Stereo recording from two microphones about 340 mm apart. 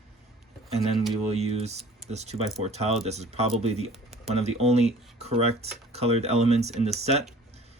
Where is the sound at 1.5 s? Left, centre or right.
Centre.